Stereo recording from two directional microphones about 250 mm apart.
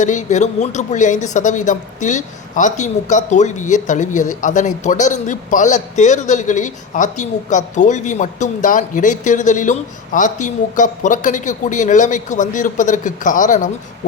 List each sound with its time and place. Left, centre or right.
0.0 s speech: left